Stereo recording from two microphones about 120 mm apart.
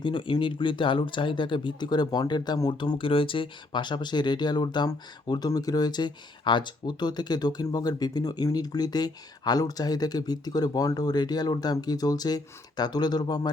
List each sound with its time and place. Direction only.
0.0 s speech: 45° left (ahead or behind)